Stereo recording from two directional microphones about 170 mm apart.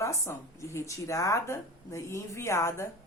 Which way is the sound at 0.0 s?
15° left (ahead or behind).